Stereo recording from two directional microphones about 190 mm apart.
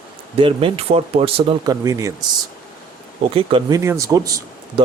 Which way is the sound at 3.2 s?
30° right (ahead or behind).